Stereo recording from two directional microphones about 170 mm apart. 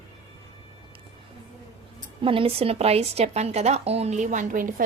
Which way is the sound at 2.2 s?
35° right (ahead or behind).